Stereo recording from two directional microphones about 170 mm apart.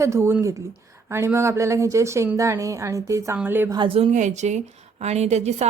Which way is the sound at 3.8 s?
35° right (ahead or behind).